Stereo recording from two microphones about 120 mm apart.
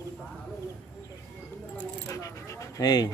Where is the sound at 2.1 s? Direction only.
25° left (ahead or behind).